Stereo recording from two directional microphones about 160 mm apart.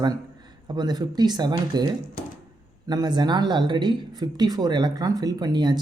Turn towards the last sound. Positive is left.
turn(degrees=-25)  # may be behind; listen again after turning